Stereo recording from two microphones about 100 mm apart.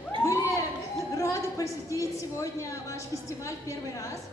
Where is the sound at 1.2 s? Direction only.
30° left (ahead or behind).